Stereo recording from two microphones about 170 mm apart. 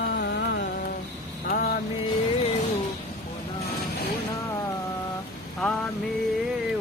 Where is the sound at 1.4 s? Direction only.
55° left (ahead or behind).